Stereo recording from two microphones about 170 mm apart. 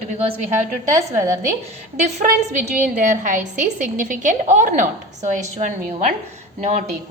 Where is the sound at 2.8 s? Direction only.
50° right (ahead or behind).